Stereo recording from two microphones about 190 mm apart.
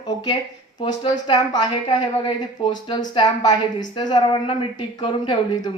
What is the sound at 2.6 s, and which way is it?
A woman's voice, 30° left (ahead or behind).